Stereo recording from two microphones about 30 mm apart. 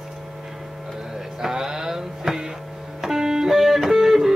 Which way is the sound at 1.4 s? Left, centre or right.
Centre.